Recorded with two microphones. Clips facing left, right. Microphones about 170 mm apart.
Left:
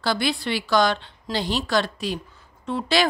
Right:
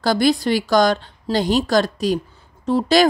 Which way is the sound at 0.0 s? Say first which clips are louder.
Right 7 dB; 40° right (ahead or behind).